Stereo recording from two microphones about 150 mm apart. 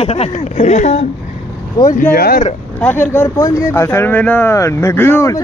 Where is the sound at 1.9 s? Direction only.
75° left (ahead or behind).